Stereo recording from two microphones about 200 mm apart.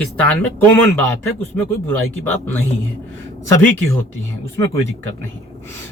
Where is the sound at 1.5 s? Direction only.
10° left (ahead or behind).